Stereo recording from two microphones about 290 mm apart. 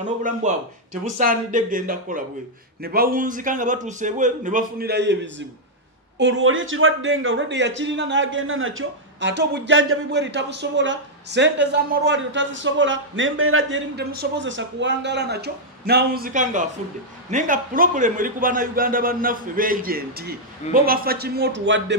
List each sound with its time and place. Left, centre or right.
0.4 s a man's voice: right